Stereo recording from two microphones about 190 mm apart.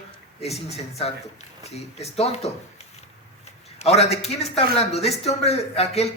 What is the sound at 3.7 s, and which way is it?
A man's voice, 35° left (ahead or behind).